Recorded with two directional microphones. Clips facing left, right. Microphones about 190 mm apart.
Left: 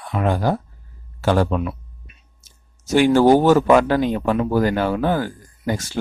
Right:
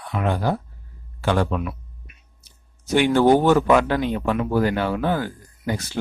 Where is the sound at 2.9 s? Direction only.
40° left (ahead or behind).